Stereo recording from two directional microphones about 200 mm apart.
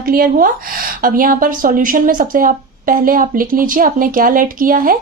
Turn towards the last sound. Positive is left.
turn(degrees=-45)  # may be behind; listen again after turning